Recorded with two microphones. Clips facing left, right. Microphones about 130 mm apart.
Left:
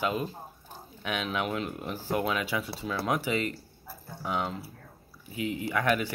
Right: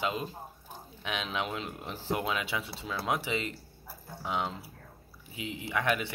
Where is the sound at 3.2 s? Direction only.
45° left (ahead or behind).